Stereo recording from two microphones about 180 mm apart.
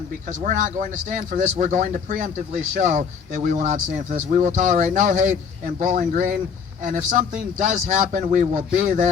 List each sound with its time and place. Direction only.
0.3 s speech: 45° right (ahead or behind)